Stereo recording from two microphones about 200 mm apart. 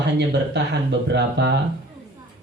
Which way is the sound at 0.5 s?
60° right (ahead or behind).